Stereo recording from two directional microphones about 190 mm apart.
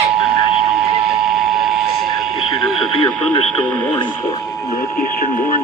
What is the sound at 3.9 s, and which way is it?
Radio, 25° left (ahead or behind).